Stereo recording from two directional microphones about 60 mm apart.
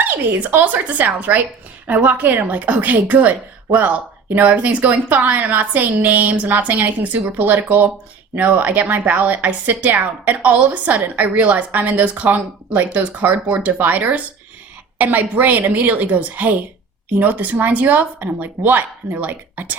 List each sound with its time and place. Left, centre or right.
0.0 s speech: right